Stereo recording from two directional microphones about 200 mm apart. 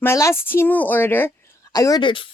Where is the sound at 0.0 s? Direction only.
15° left (ahead or behind).